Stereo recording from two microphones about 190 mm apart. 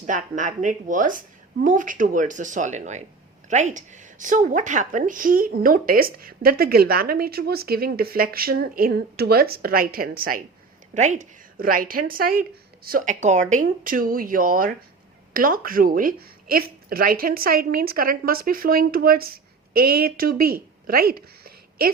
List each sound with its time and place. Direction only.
0.0 s a woman's voice: 40° right (ahead or behind)